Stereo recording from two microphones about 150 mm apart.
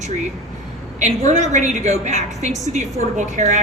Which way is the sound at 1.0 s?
50° right (ahead or behind).